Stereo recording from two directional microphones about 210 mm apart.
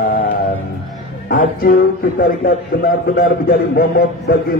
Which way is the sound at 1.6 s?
40° left (ahead or behind).